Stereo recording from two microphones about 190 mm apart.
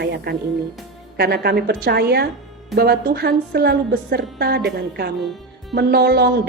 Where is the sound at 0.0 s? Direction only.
60° right (ahead or behind).